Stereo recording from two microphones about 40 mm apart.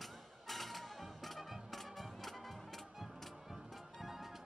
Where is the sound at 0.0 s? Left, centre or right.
Centre.